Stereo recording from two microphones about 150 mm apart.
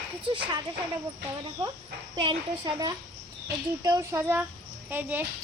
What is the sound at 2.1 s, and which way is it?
A child's voice, 30° right (ahead or behind).